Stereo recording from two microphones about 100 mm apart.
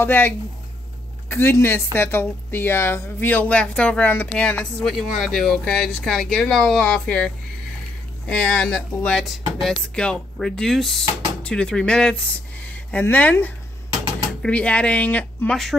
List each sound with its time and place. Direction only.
0.0 s speech: 20° left (ahead or behind)
1.3 s speech: 25° left (ahead or behind)
4.9 s speech: centre (ahead or behind)